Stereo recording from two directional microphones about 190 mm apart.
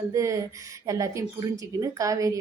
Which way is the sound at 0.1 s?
15° right (ahead or behind).